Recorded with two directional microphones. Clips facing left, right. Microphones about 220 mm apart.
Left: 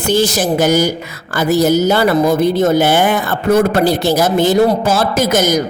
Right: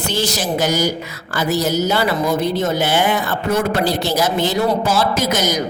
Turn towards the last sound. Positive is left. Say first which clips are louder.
# left 5 dB
turn(degrees=50)  # may be behind; listen again after turning